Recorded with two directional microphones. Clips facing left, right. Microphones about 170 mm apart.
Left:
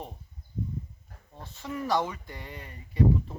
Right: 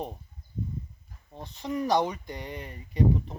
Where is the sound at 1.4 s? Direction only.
20° right (ahead or behind).